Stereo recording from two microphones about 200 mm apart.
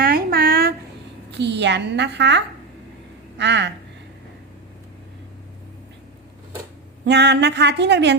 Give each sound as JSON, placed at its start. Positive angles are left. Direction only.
{"t": 0.0, "sound": "a sound", "side_deg": -50}
{"t": 1.3, "sound": "a woman's voice", "side_deg": -60}
{"t": 7.0, "sound": "a woman's voice", "side_deg": -60}